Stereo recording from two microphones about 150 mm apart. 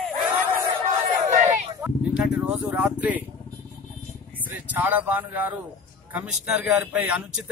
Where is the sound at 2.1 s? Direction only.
10° right (ahead or behind).